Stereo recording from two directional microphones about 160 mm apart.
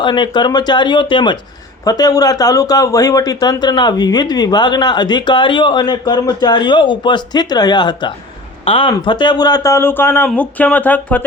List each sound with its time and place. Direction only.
0.0 s speech: 30° left (ahead or behind); by 11.3 s 10° left (ahead or behind)